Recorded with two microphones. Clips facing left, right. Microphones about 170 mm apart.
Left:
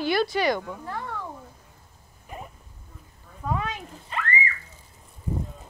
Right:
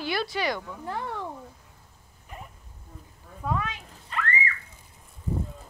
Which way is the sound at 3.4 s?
5° right (ahead or behind).